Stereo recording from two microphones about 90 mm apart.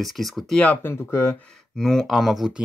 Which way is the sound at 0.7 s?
25° left (ahead or behind).